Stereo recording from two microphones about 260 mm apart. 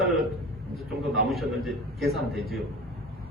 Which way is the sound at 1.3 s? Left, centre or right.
Centre.